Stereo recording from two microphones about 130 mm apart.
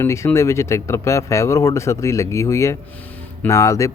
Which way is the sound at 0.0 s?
20° left (ahead or behind).